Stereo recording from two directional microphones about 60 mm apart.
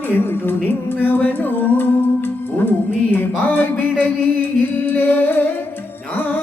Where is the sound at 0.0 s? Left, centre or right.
Left.